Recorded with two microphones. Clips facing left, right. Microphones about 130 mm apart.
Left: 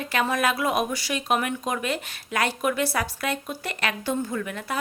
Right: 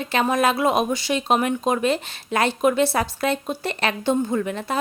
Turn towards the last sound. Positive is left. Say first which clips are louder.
# right 6 dB
turn(degrees=-30)  # may be behind; listen again after turning